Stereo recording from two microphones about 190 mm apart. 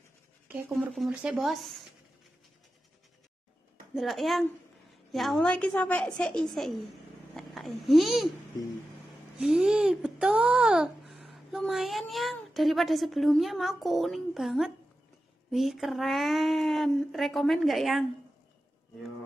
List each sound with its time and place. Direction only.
0.5 s speech: 5° right (ahead or behind)
3.9 s a child's voice: centre (ahead or behind)
9.4 s speech: 5° right (ahead or behind)